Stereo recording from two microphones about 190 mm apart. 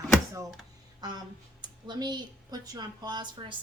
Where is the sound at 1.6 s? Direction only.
20° right (ahead or behind).